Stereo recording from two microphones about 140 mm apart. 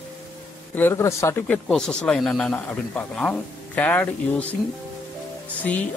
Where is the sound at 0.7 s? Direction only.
15° left (ahead or behind).